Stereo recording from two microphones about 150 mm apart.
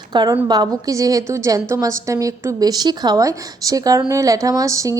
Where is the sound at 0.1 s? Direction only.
30° right (ahead or behind).